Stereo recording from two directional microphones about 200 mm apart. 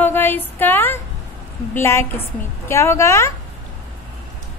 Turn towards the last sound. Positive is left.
turn(degrees=15)  # may be behind; listen again after turning